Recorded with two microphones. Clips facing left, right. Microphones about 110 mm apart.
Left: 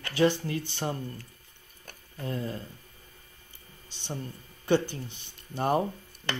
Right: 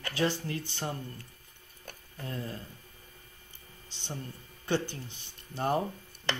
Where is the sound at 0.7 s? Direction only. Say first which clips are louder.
Left 4 dB; 15° left (ahead or behind).